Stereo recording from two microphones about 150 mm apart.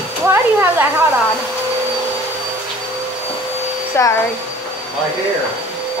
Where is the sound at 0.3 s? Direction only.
15° right (ahead or behind).